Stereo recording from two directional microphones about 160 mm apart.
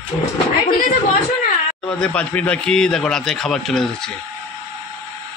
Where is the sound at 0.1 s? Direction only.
20° left (ahead or behind).